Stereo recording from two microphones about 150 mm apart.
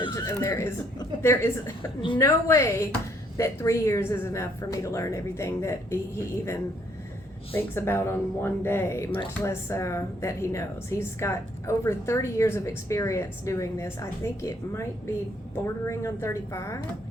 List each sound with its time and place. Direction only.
0.3 s speech: 20° left (ahead or behind)
2.0 s a woman's voice: 35° left (ahead or behind)
2.2 s speech: 20° left (ahead or behind)